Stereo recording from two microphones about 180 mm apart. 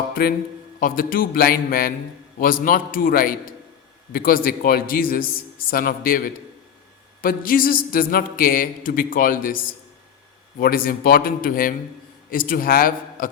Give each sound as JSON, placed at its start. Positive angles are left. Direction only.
{"t": 0.1, "sound": "a man's voice", "side_deg": 60}
{"t": 10.6, "sound": "a man's voice", "side_deg": 55}